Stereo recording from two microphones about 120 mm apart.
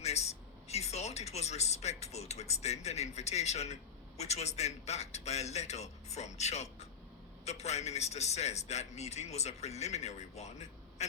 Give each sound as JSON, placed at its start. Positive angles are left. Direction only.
{"t": 0.0, "sound": "speech", "side_deg": 65}